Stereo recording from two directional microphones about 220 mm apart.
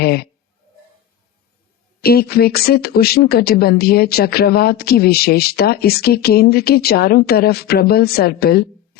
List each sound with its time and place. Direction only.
0.0 s speech: 45° left (ahead or behind)
2.0 s speech: 45° left (ahead or behind)